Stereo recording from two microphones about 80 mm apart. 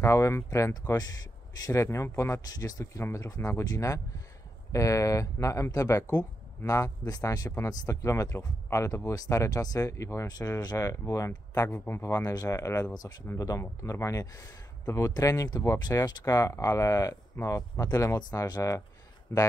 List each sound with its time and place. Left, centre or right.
0.0 s speech: left
10.2 s speech: left
11.7 s speech: left
12.0 s speech: left
19.3 s speech: left